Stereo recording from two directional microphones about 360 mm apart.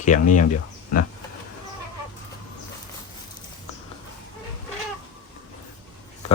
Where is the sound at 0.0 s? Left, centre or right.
Left.